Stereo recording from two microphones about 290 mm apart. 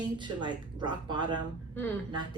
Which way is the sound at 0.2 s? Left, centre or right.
Centre.